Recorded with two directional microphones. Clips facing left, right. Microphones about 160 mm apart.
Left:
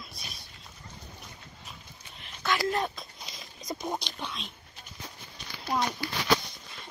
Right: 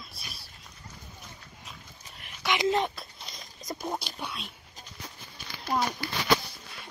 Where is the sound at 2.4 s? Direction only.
20° right (ahead or behind).